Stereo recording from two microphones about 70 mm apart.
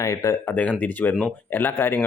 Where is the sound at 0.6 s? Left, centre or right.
Left.